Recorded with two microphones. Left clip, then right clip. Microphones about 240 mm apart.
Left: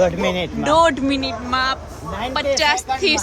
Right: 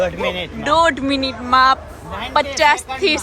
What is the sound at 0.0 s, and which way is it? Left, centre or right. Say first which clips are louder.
Speech: left 2 dB; left.